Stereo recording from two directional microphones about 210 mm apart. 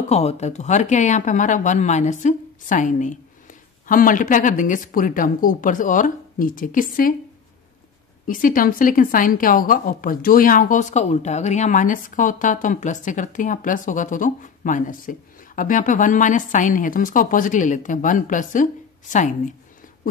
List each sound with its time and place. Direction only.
0.1 s a woman's voice: 30° left (ahead or behind)
8.3 s a woman's voice: 40° left (ahead or behind)